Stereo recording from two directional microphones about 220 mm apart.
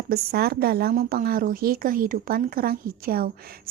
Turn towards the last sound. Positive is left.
turn(degrees=-45)  # may be behind; listen again after turning